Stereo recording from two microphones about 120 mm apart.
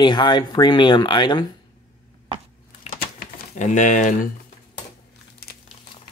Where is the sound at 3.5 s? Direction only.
90° left.